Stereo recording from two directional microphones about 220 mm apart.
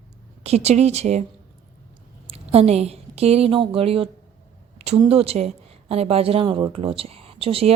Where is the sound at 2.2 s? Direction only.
25° right (ahead or behind).